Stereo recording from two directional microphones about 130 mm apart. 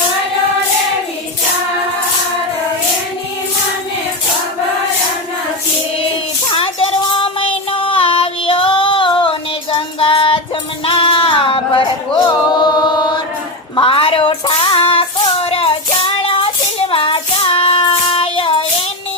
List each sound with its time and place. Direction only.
6.5 s child singing: 45° left (ahead or behind)
10.8 s a sound: 40° left (ahead or behind)
12.5 s chant: 35° left (ahead or behind)
13.7 s child singing: 45° left (ahead or behind)